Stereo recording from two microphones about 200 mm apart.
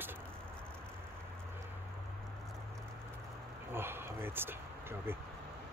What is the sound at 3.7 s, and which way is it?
Speech, 10° right (ahead or behind).